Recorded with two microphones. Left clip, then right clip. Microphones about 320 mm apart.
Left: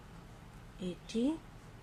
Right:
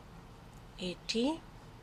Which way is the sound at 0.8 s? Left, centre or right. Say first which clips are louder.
Right 4 dB; right.